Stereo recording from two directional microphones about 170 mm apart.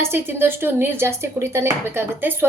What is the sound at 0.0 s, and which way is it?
A woman's voice, 15° right (ahead or behind).